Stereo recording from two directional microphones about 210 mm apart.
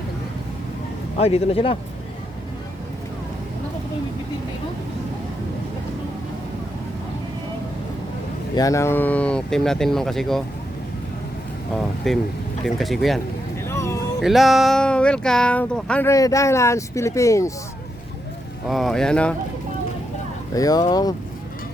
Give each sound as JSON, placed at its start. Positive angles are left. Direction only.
{"t": 1.1, "sound": "a man's voice", "side_deg": 30}
{"t": 8.5, "sound": "speech", "side_deg": 15}
{"t": 12.1, "sound": "speech", "side_deg": 0}
{"t": 13.7, "sound": "a sound", "side_deg": 15}
{"t": 14.2, "sound": "speech", "side_deg": 0}
{"t": 18.7, "sound": "speech", "side_deg": 0}
{"t": 20.6, "sound": "speech", "side_deg": 15}